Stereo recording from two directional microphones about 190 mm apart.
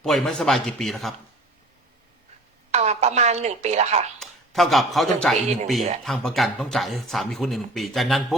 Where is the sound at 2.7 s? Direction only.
35° right (ahead or behind).